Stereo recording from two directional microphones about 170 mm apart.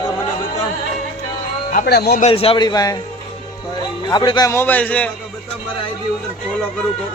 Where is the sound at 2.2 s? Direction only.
35° left (ahead or behind).